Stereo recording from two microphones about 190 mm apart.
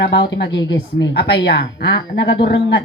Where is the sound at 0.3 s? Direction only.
65° left (ahead or behind).